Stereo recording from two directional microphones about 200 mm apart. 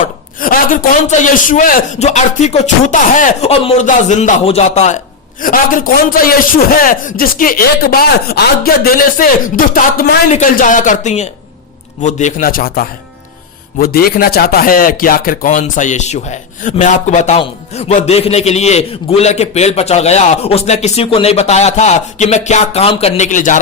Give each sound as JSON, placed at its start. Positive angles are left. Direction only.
{"t": 0.0, "sound": "speech", "side_deg": 45}